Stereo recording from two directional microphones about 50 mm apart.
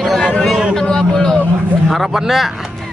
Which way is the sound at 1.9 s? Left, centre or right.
Centre.